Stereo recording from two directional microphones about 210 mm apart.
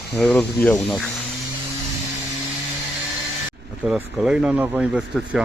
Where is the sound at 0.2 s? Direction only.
5° left (ahead or behind).